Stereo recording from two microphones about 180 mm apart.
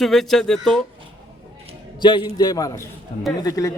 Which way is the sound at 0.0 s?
Centre (ahead or behind).